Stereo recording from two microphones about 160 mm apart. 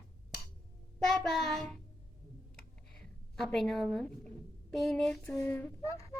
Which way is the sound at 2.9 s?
5° left (ahead or behind).